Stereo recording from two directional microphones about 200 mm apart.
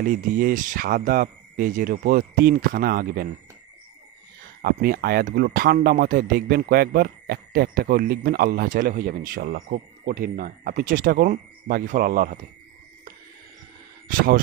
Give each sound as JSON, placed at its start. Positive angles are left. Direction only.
{"t": 0.0, "sound": "speech", "side_deg": -45}
{"t": 4.6, "sound": "speech", "side_deg": -50}
{"t": 14.0, "sound": "speech", "side_deg": -45}